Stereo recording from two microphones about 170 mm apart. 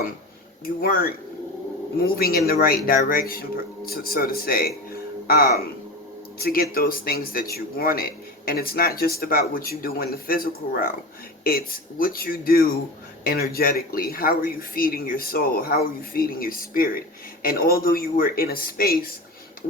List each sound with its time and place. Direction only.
0.6 s speech: 60° left (ahead or behind)
2.1 s speech: 65° left (ahead or behind)